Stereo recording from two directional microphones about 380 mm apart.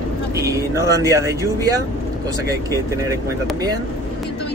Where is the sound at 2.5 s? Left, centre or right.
Centre.